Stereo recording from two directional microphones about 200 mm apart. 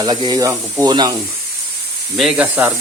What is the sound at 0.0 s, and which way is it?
Speech, 20° right (ahead or behind).